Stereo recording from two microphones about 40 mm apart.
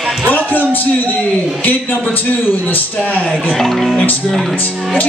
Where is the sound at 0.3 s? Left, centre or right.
Left.